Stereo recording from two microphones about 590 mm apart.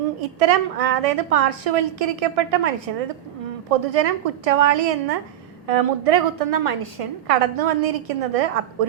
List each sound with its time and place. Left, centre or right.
0.2 s a woman's voice: right